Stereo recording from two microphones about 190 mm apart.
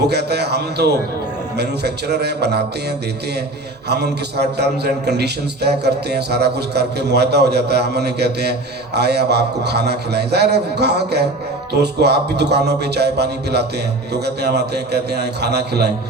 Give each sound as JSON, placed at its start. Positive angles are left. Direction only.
{"t": 0.1, "sound": "a man's voice", "side_deg": -60}
{"t": 3.8, "sound": "a man's voice", "side_deg": -60}